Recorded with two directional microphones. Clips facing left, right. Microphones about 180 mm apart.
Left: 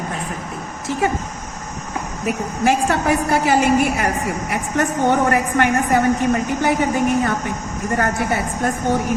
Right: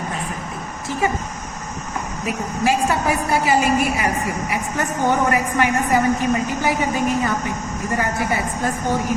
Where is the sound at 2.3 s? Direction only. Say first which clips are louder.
Left 2 dB; 60° left (ahead or behind).